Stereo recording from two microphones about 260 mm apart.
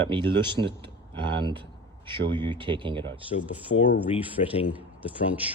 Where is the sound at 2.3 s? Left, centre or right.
Centre.